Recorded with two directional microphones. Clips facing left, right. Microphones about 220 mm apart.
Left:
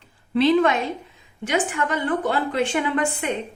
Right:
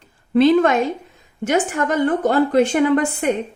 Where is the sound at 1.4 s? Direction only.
45° right (ahead or behind).